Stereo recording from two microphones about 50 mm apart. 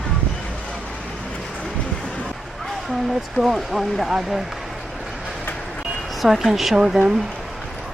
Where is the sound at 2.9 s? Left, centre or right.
Centre.